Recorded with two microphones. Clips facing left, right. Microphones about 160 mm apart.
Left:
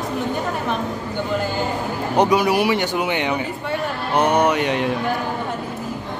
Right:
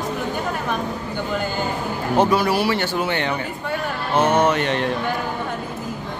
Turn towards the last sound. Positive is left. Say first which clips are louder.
# left 1 dB
turn(degrees=10)  # may be behind; listen again after turning